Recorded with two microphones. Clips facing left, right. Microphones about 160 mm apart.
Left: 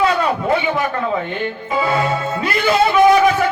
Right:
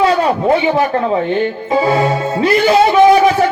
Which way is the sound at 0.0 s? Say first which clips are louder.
Right 4 dB; 40° right (ahead or behind).